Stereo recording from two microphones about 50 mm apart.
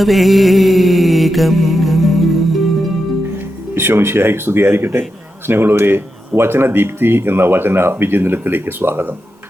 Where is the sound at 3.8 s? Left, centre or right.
Right.